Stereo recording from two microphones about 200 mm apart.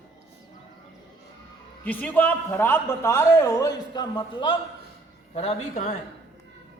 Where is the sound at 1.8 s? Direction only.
10° left (ahead or behind); by 5.6 s 30° left (ahead or behind).